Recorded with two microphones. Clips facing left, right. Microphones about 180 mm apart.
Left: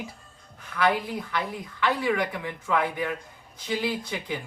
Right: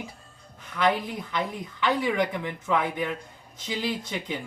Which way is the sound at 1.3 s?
20° right (ahead or behind).